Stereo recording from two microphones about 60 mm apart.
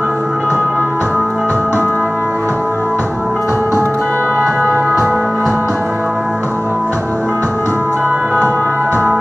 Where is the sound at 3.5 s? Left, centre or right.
Left.